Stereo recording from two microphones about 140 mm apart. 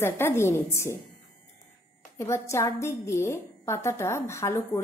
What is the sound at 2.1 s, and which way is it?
A woman's voice, 20° left (ahead or behind).